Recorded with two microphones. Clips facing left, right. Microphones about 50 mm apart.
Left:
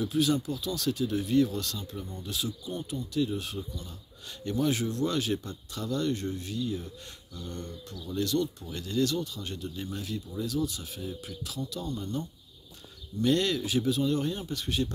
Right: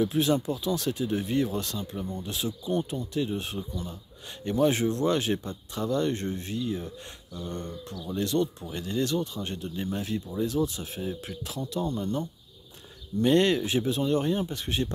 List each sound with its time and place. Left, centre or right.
0.0 s speech: right